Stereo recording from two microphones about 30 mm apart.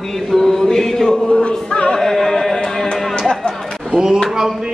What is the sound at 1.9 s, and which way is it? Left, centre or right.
Music, centre.